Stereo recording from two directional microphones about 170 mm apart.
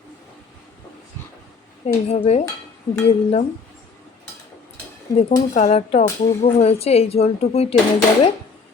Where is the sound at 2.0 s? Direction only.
35° left (ahead or behind).